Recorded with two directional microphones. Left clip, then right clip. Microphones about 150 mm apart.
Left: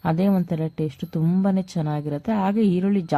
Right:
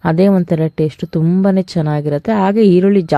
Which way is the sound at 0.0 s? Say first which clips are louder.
Right 10 dB; 35° right (ahead or behind).